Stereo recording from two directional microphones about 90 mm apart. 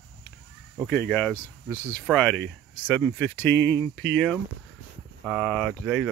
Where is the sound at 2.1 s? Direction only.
10° left (ahead or behind).